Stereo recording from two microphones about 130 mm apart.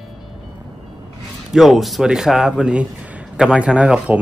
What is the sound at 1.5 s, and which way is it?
Speech, centre (ahead or behind).